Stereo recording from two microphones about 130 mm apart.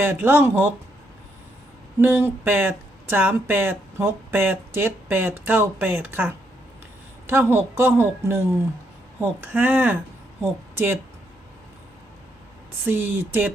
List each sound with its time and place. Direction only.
0.0 s speech: 15° right (ahead or behind)
2.0 s speech: 15° right (ahead or behind)
12.8 s speech: 15° right (ahead or behind)